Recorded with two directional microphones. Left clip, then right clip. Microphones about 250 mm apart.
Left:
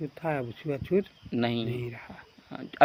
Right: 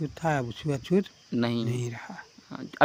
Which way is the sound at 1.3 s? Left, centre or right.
Right.